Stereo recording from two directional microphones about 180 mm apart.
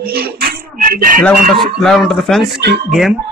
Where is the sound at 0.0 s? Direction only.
60° right (ahead or behind).